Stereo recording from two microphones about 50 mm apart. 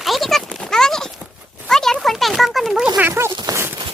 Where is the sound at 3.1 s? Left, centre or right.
Right.